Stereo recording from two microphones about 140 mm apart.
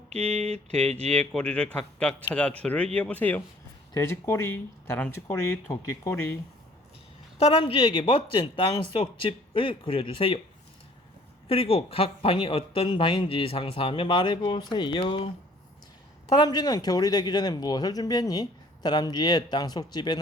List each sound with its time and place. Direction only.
0.1 s a sound: 50° right (ahead or behind)
1.3 s a man's voice: 5° left (ahead or behind)
7.3 s speech: 45° left (ahead or behind)
11.4 s speech: 45° left (ahead or behind)
16.4 s a man's voice: 30° left (ahead or behind)